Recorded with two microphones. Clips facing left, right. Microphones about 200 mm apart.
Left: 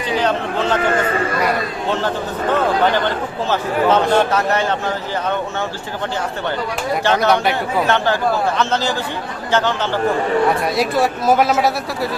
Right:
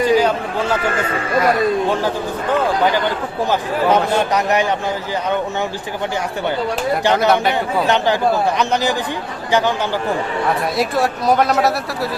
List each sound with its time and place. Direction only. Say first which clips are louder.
0.0 s speech: right 4 dB; 10° right (ahead or behind)
3.5 s a man's voice: left 1 dB; 15° right (ahead or behind)
7.0 s a man's voice: even; 15° right (ahead or behind)
7.3 s a man's voice: right 1 dB; centre (ahead or behind)
7.9 s a man's voice: right 2 dB; 15° right (ahead or behind)
10.8 s a man's voice: left 1 dB; centre (ahead or behind)